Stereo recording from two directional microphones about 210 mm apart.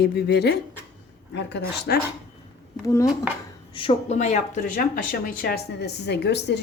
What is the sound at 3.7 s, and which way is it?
Speech, 25° left (ahead or behind).